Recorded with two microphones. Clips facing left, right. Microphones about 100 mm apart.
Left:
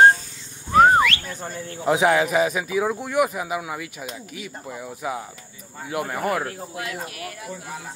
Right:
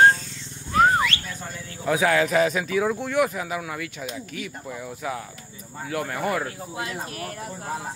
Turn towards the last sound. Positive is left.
turn(degrees=-40)  # may be behind; listen again after turning